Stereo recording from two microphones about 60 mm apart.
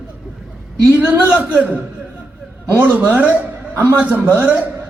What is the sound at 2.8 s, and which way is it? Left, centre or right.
Speech, right.